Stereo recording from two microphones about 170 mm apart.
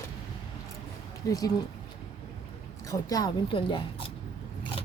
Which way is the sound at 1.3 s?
20° left (ahead or behind).